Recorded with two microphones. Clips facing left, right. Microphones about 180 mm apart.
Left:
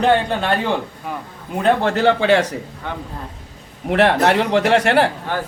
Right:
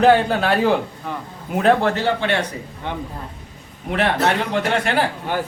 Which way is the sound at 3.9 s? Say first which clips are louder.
Left 4 dB; 70° left (ahead or behind).